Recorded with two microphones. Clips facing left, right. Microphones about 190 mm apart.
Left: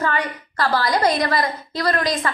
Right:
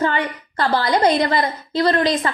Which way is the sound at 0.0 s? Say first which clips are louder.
Right 3 dB; 25° right (ahead or behind).